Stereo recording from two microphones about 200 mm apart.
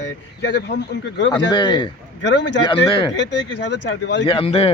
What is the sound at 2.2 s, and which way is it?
Speech, 65° left (ahead or behind).